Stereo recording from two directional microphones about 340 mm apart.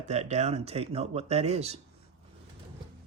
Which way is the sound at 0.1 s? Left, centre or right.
Centre.